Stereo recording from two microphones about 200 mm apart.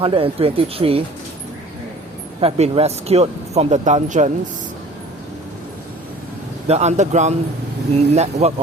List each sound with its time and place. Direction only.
0.0 s speech: 25° right (ahead or behind)
2.4 s speech: 30° right (ahead or behind)
6.7 s speech: 35° right (ahead or behind)